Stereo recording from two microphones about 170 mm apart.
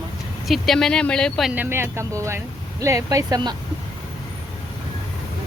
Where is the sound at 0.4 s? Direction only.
Centre (ahead or behind).